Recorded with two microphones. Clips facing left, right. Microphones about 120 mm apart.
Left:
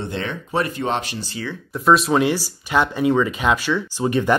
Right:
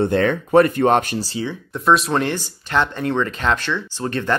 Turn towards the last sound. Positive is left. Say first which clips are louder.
# left 3 dB
turn(degrees=10)  # may be behind; listen again after turning